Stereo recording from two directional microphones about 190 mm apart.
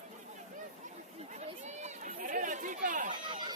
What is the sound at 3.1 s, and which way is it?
Chatter, 25° right (ahead or behind).